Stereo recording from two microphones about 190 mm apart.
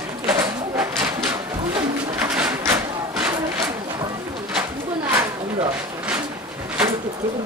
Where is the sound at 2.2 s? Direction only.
5° right (ahead or behind).